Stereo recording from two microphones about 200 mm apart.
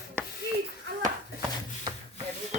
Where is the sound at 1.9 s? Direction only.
35° right (ahead or behind).